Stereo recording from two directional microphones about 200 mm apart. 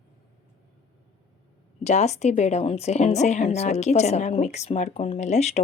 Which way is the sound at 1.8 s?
35° left (ahead or behind).